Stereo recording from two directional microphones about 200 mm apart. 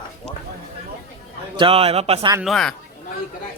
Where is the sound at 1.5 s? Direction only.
30° right (ahead or behind).